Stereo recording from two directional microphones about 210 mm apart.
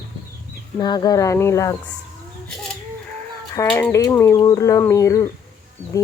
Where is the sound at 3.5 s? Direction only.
10° left (ahead or behind).